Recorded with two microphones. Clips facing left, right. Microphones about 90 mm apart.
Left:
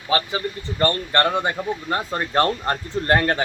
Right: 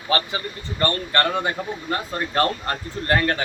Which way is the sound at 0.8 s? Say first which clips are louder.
Left 2 dB; 25° left (ahead or behind).